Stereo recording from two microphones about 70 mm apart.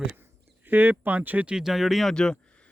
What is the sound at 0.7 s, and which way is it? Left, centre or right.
Speech, right.